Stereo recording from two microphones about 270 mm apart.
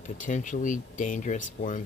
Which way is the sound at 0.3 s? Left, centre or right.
Left.